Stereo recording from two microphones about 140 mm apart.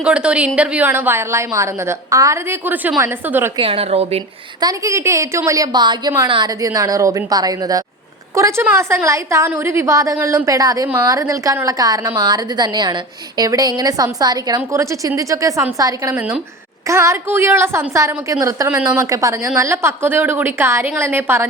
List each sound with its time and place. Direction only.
0.0 s a woman's voice: 5° right (ahead or behind)
3.6 s a woman's voice: 45° right (ahead or behind)
4.6 s a woman's voice: 20° right (ahead or behind)